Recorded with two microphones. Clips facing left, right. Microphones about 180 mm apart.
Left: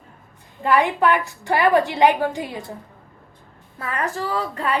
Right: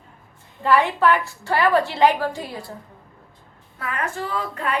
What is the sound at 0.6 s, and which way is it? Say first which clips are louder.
A woman's voice: even; 15° left (ahead or behind).